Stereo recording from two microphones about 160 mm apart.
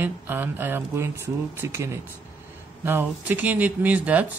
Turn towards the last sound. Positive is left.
turn(degrees=-10)  # may be behind; listen again after turning